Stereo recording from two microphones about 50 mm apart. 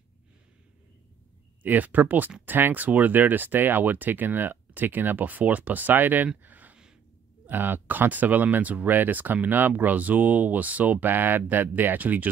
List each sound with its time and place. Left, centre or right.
1.6 s speech: right